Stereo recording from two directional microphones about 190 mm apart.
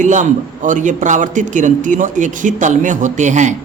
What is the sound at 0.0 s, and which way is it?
A man's voice, 40° right (ahead or behind).